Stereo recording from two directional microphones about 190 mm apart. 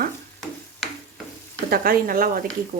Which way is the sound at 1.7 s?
50° right (ahead or behind).